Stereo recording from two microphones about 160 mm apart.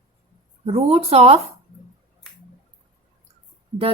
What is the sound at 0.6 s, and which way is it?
Speech, 40° right (ahead or behind).